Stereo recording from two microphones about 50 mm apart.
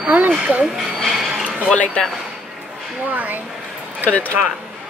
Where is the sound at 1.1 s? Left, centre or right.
Centre.